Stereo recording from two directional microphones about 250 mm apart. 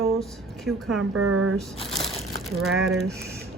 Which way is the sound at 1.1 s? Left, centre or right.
Right.